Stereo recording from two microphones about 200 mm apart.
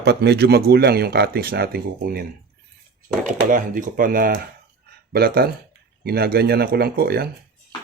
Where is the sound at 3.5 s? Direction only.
45° right (ahead or behind).